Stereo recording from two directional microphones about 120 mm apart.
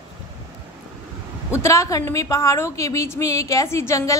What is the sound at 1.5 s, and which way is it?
A woman's voice, 25° left (ahead or behind).